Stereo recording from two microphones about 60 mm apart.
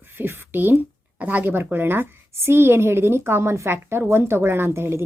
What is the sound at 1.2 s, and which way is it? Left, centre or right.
A woman's voice, right.